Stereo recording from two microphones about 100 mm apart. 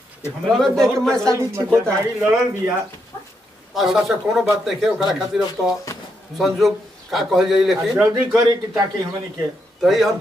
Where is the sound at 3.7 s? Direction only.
Centre (ahead or behind).